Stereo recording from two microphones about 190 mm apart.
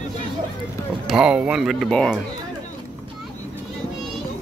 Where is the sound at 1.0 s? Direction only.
5° right (ahead or behind).